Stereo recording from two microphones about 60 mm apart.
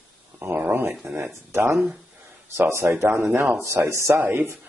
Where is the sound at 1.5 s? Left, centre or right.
Right.